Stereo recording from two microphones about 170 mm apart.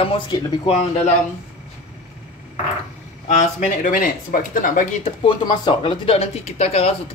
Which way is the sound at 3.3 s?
50° left (ahead or behind).